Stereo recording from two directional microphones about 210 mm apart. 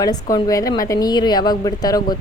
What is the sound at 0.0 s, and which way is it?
A woman's voice, 20° left (ahead or behind).